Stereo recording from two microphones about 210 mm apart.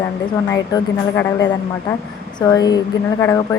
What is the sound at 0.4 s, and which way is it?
A woman's voice, 15° left (ahead or behind).